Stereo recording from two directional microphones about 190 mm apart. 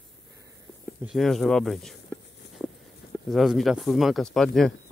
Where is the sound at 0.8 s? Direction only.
Centre (ahead or behind).